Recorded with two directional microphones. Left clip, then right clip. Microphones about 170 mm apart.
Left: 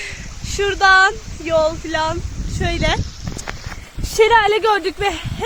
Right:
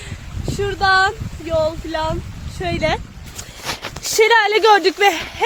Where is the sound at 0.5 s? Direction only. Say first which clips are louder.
Left 3 dB; 20° left (ahead or behind).